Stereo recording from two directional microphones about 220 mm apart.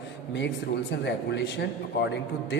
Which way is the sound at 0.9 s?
50° left (ahead or behind).